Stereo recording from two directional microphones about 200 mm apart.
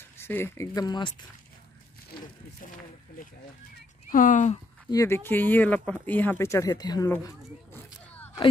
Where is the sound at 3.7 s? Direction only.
40° left (ahead or behind).